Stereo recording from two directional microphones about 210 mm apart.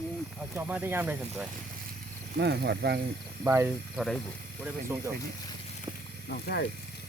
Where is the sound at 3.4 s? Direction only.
10° right (ahead or behind).